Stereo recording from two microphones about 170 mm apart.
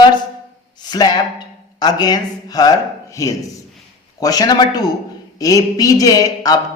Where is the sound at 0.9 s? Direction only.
25° left (ahead or behind).